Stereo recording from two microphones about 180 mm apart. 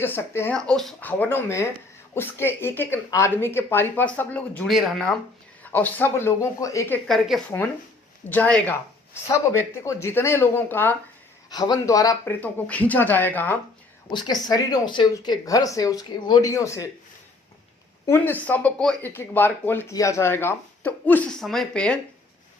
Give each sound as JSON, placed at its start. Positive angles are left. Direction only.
{"t": 0.0, "sound": "speech", "side_deg": 10}
{"t": 11.4, "sound": "speech", "side_deg": 20}
{"t": 14.1, "sound": "speech", "side_deg": 25}
{"t": 18.0, "sound": "speech", "side_deg": 10}